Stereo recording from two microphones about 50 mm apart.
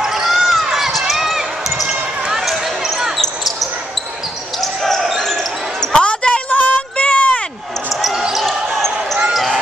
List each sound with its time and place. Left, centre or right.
0.0 s basketball bounce: centre
4.6 s basketball bounce: centre
5.9 s basketball bounce: left
6.5 s a sound: left
7.9 s basketball bounce: centre
8.5 s basketball bounce: centre